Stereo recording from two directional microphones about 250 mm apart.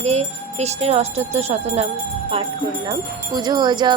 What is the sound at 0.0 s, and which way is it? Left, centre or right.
Speech, right.